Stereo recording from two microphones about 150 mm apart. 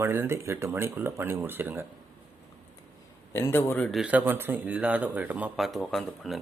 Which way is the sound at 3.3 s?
20° left (ahead or behind).